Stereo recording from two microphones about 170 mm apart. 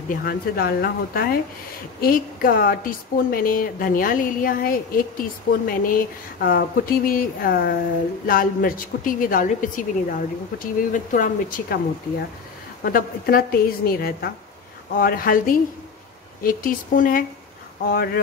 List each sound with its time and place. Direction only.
0.1 s a woman's voice: 60° left (ahead or behind)
12.8 s a woman's voice: 60° left (ahead or behind)